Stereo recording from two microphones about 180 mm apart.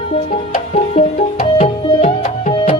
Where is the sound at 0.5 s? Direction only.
45° left (ahead or behind).